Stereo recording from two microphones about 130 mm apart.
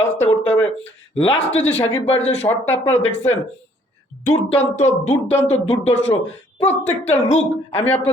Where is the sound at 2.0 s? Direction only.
55° left (ahead or behind).